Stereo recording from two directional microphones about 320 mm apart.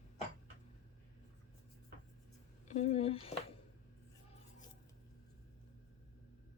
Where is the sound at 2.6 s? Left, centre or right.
Left.